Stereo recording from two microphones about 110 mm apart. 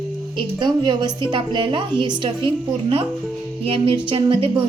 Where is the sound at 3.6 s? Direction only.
55° right (ahead or behind).